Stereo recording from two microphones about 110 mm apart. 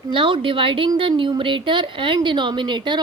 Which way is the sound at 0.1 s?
50° right (ahead or behind).